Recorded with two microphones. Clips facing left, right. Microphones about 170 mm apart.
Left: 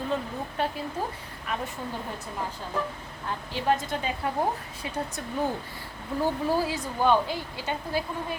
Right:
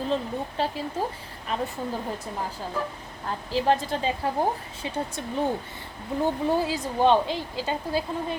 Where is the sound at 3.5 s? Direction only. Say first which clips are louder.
Right 3 dB; 30° right (ahead or behind).